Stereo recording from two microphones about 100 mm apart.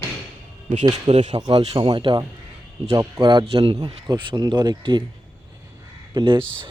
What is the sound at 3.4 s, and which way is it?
Speech, 70° right (ahead or behind).